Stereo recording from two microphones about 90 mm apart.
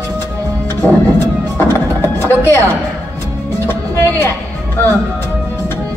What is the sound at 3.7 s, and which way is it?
Music, 30° left (ahead or behind).